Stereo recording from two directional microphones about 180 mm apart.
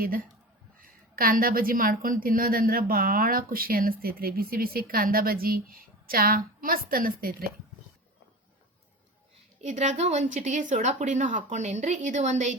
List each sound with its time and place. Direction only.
1.1 s a woman's voice: 55° right (ahead or behind)
9.6 s a woman's voice: 40° right (ahead or behind)